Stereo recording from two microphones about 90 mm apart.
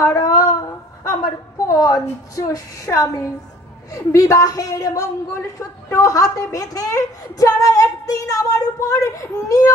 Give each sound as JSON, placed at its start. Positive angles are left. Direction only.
{"t": 0.0, "sound": "a woman's voice", "side_deg": 35}